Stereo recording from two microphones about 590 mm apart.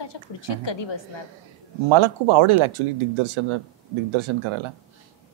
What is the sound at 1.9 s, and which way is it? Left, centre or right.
Speech, right.